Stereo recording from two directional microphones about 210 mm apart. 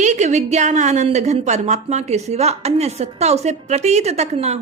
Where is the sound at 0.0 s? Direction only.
35° right (ahead or behind).